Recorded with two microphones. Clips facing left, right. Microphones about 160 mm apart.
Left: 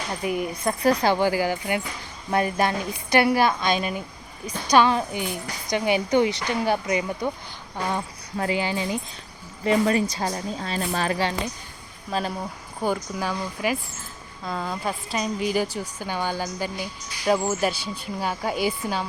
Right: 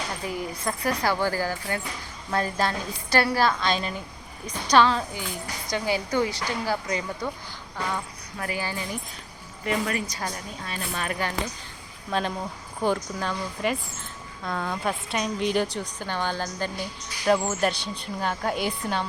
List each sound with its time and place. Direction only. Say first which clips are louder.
0.3 s a woman's voice: left 6 dB; 15° left (ahead or behind)
12.1 s a woman's voice: even; 5° left (ahead or behind)